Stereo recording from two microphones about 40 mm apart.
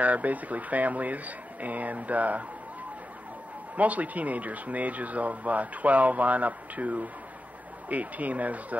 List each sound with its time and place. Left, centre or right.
0.0 s speech: right
3.7 s speech: right